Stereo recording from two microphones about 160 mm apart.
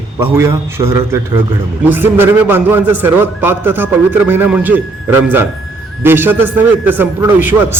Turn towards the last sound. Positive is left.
turn(degrees=-15)  # may be behind; listen again after turning